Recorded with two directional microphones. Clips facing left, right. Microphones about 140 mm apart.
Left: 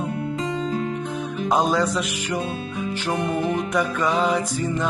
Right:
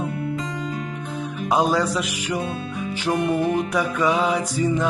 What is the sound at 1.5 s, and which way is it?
Music, 5° right (ahead or behind).